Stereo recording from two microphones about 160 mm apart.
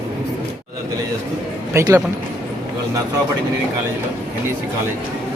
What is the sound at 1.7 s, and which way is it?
Speech, 15° right (ahead or behind).